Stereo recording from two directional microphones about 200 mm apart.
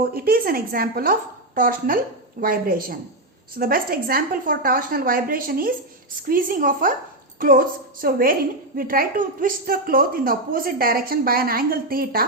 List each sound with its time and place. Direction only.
0.0 s a woman's voice: 50° right (ahead or behind)